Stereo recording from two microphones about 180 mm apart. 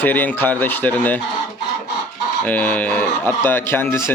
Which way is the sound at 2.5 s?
10° left (ahead or behind).